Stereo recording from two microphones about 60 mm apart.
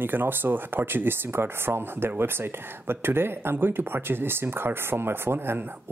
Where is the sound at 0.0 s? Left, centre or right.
Right.